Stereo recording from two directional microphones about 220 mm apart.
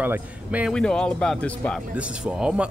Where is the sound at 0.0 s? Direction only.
5° right (ahead or behind).